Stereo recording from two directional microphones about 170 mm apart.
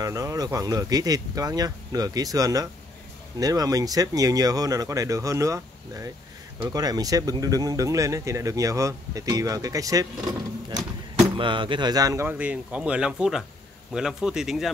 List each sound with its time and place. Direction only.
0.0 s speech: 20° right (ahead or behind); by 14.7 s centre (ahead or behind)